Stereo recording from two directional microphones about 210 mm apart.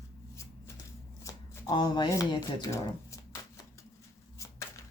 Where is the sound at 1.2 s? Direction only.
15° left (ahead or behind).